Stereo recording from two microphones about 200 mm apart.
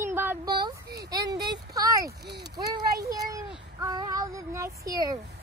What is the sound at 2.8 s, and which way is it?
Speech, 50° right (ahead or behind).